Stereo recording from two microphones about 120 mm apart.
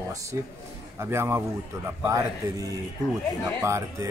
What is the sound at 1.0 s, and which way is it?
Speech, 20° right (ahead or behind).